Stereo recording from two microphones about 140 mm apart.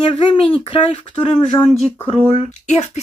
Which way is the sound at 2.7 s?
55° left (ahead or behind).